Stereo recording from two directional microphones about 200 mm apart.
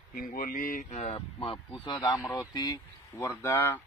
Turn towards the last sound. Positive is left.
turn(degrees=10)  # may be behind; listen again after turning